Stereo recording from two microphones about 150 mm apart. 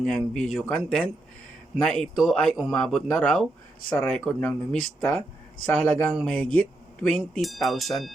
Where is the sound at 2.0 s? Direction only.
5° left (ahead or behind).